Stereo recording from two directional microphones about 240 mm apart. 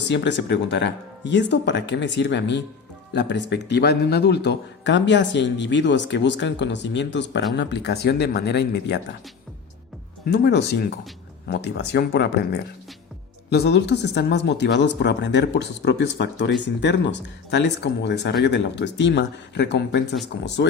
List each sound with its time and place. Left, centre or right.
0.0 s a man's voice: left
10.2 s a man's voice: left
13.5 s a man's voice: left